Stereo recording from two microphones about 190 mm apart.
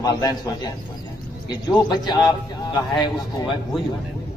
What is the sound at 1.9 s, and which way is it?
Speech, 20° left (ahead or behind).